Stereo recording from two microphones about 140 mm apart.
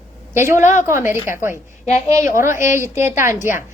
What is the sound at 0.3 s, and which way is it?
A woman's voice, 20° right (ahead or behind).